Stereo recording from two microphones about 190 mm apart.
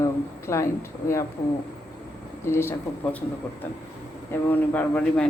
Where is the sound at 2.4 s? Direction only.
15° left (ahead or behind).